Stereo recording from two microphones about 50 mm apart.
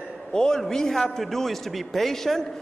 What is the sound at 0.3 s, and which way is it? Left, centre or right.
A man's voice, centre.